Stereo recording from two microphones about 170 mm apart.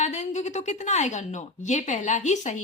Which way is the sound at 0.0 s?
45° left (ahead or behind).